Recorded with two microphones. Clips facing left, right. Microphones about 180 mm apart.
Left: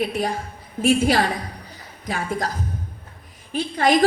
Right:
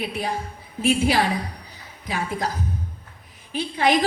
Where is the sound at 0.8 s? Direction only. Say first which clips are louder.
Left 2 dB; 50° left (ahead or behind).